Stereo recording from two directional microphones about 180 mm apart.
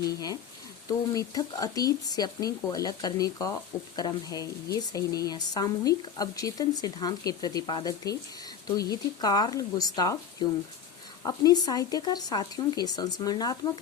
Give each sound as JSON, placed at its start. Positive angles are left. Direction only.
{"t": 0.0, "sound": "speech", "side_deg": 20}
{"t": 11.2, "sound": "speech", "side_deg": 20}